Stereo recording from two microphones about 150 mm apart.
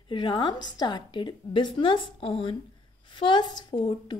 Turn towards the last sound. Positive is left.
turn(degrees=30)  # may be behind; listen again after turning